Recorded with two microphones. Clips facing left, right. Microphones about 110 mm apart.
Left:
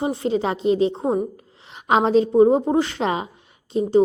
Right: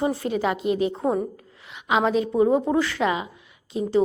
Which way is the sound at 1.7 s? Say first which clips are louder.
Left 4 dB; 40° left (ahead or behind).